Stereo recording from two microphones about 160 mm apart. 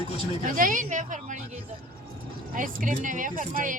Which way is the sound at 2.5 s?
55° right (ahead or behind).